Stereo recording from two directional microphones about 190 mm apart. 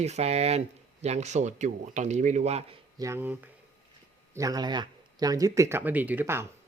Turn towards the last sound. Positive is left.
turn(degrees=-10)  # may be behind; listen again after turning